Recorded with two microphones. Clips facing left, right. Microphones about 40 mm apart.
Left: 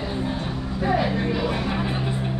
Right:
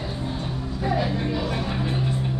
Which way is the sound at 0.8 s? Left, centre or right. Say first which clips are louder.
Left 3 dB; centre.